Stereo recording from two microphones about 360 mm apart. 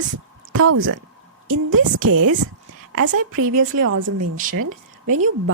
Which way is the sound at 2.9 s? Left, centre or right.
Right.